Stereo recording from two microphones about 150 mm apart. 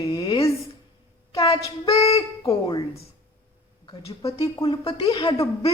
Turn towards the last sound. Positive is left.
turn(degrees=30)  # may be behind; listen again after turning